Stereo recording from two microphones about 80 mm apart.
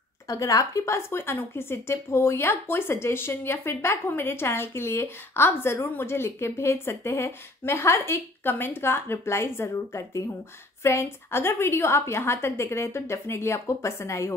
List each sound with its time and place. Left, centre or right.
0.3 s a woman's voice: left